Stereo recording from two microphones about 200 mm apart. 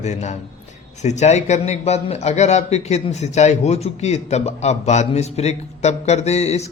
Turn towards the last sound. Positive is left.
turn(degrees=35)  # may be behind; listen again after turning